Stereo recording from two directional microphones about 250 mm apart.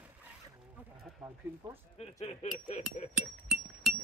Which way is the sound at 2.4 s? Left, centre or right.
Left.